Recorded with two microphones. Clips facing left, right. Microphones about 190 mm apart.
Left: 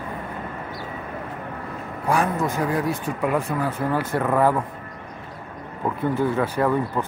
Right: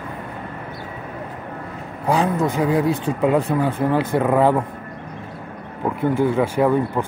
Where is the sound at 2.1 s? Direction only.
20° right (ahead or behind).